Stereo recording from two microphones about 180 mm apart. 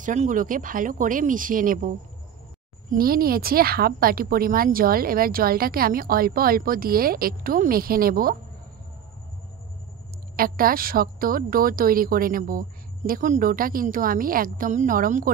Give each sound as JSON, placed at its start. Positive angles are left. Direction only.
{"t": 0.0, "sound": "a woman's voice", "side_deg": -45}
{"t": 10.3, "sound": "a woman's voice", "side_deg": -55}